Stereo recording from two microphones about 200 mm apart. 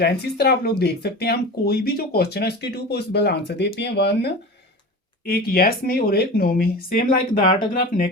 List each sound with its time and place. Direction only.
0.0 s speech: 55° left (ahead or behind)